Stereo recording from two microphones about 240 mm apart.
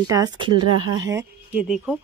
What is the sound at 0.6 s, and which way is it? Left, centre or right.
Speech, right.